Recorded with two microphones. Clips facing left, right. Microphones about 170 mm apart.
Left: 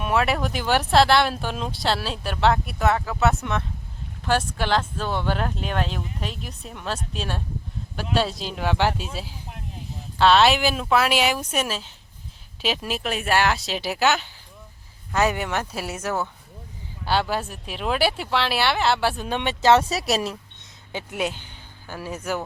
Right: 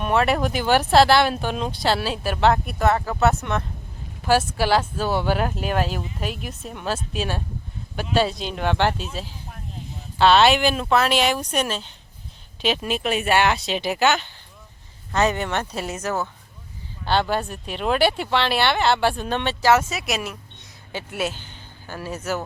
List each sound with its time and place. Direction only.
0.0 s speech: centre (ahead or behind)
10.2 s speech: centre (ahead or behind)
19.6 s speech: 30° left (ahead or behind)
21.2 s speech: 15° left (ahead or behind)